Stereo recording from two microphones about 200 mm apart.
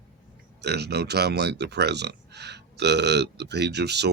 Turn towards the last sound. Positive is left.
turn(degrees=-55)  # may be behind; listen again after turning